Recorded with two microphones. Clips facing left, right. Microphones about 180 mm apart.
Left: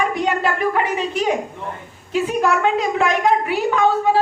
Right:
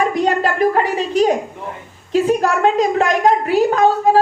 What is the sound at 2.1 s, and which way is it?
A woman's voice, 40° right (ahead or behind).